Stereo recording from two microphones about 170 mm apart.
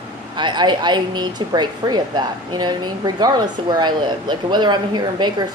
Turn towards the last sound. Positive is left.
turn(degrees=-25)  # may be behind; listen again after turning